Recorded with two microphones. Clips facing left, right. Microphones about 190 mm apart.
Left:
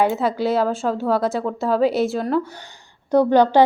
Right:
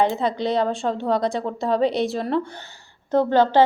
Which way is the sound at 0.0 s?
5° left (ahead or behind).